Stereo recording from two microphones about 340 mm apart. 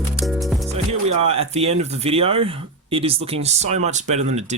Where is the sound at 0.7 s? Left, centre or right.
Centre.